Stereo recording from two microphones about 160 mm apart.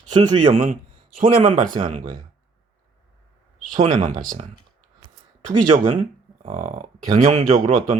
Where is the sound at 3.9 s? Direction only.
50° right (ahead or behind).